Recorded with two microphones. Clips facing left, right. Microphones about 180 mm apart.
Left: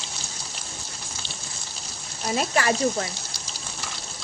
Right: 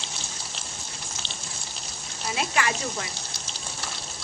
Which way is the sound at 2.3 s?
40° left (ahead or behind).